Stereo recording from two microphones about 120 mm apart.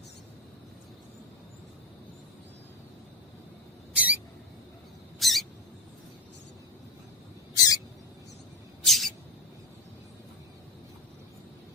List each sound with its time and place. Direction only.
3.9 s rodents: 10° right (ahead or behind)
5.2 s rodents: centre (ahead or behind)
7.5 s owl: 30° left (ahead or behind)
8.8 s mouse: centre (ahead or behind)